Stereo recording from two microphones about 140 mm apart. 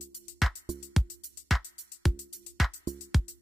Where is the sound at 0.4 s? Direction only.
Centre (ahead or behind).